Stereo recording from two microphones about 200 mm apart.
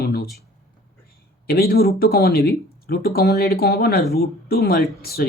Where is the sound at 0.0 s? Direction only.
50° left (ahead or behind).